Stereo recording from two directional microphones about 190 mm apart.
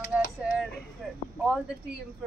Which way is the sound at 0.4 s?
Centre (ahead or behind).